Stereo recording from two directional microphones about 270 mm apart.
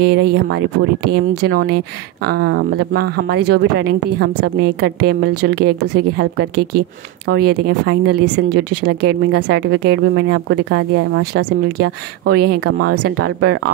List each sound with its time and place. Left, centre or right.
0.0 s speech: right
1.0 s speech: right
1.5 s speech: right